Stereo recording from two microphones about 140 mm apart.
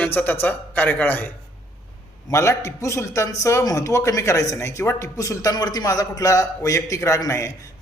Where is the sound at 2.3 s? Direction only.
20° left (ahead or behind).